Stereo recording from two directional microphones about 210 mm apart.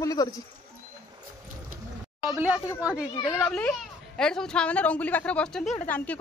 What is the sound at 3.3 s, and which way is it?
A woman's voice, 5° left (ahead or behind).